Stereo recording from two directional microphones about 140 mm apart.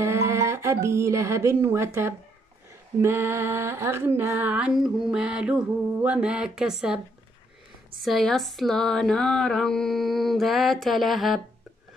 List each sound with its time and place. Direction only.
0.0 s speech: 20° right (ahead or behind)
3.0 s female singing: 15° right (ahead or behind)
8.0 s a sound: centre (ahead or behind)